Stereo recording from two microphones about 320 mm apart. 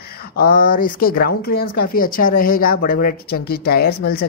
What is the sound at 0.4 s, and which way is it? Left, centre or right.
Speech, left.